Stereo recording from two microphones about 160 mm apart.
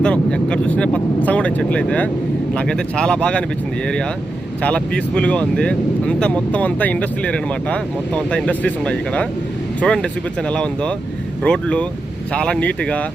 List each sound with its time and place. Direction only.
0.0 s speech: 5° left (ahead or behind)
4.6 s speech: 5° left (ahead or behind)